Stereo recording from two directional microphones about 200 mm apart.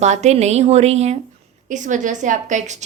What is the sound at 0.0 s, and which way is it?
A woman's voice, 35° right (ahead or behind).